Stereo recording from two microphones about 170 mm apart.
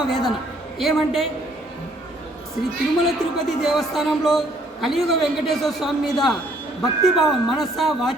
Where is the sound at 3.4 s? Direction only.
Centre (ahead or behind).